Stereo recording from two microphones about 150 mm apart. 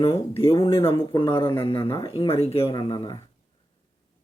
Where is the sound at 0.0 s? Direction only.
40° left (ahead or behind).